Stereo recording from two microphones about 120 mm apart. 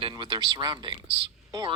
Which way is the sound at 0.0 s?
40° right (ahead or behind).